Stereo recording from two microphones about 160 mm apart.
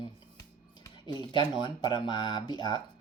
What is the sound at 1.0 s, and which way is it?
Speech, 30° left (ahead or behind).